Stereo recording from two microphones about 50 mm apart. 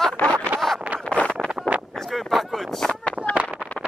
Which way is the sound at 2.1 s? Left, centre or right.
Centre.